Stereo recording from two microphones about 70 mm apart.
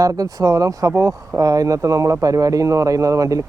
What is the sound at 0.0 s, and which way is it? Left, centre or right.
Speech, right.